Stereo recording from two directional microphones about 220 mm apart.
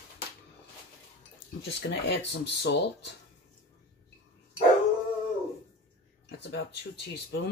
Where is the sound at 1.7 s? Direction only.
50° left (ahead or behind).